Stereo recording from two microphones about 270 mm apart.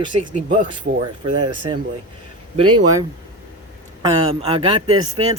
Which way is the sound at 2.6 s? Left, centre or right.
Right.